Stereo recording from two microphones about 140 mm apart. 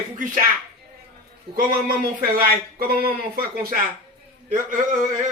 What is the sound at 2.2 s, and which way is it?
Speech, 90° right.